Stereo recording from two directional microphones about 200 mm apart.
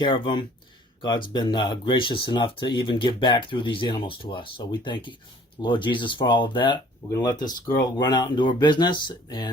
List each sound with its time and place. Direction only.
0.0 s speech: 25° left (ahead or behind)